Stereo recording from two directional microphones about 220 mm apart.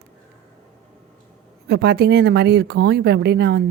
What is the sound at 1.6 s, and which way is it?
Speech, 45° right (ahead or behind).